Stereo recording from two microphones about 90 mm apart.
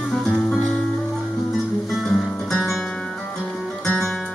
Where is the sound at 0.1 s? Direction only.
5° left (ahead or behind).